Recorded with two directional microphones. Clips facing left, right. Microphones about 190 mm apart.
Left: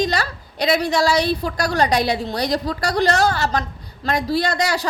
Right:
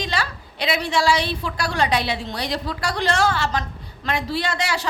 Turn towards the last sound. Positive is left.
turn(degrees=40)  # may be behind; listen again after turning